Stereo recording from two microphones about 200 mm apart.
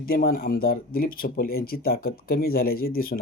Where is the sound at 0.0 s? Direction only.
50° left (ahead or behind).